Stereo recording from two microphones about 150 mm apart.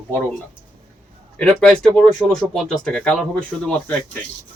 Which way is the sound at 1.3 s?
5° left (ahead or behind).